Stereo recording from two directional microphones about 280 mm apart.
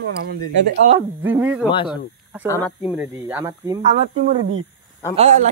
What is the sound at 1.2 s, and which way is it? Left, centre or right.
Speech, centre.